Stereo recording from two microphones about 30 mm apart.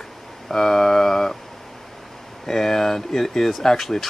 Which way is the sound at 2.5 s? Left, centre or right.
Centre.